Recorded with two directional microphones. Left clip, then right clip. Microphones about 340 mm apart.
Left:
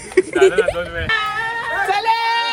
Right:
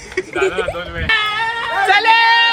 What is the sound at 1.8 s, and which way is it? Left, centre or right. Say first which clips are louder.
Speech: right 7 dB; right.